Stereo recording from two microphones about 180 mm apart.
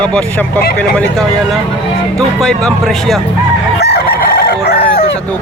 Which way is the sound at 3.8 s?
60° left (ahead or behind).